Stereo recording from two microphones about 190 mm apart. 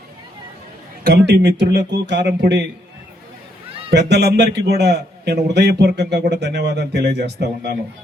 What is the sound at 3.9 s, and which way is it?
A man's voice, 60° right (ahead or behind).